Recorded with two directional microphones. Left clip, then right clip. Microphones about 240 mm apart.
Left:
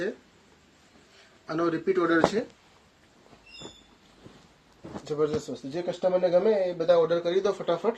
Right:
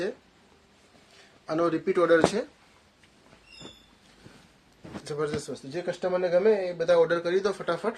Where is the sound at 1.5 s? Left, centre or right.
Right.